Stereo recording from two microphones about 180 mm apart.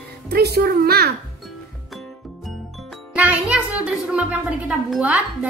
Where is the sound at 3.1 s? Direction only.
10° right (ahead or behind).